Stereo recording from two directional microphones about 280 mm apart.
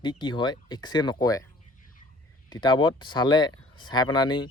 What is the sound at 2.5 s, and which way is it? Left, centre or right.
Speech, centre.